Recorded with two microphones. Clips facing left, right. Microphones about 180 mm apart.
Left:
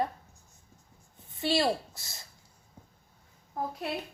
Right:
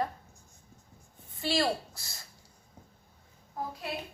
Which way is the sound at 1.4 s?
25° left (ahead or behind).